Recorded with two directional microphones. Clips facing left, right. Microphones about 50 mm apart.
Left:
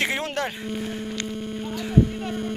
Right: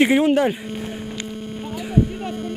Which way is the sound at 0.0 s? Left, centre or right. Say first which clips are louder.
Right 10 dB; centre.